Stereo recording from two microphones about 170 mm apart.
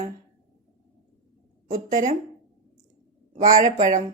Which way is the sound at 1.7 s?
50° right (ahead or behind).